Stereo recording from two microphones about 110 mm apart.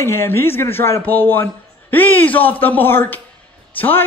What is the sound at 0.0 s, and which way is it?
A man's voice, 25° left (ahead or behind).